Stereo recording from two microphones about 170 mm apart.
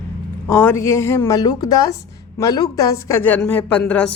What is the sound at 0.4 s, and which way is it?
A woman's voice, 10° left (ahead or behind).